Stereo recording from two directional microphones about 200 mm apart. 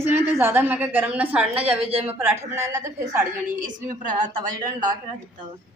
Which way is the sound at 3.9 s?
20° right (ahead or behind).